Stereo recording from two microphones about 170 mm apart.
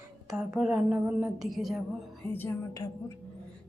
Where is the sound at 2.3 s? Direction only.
15° left (ahead or behind).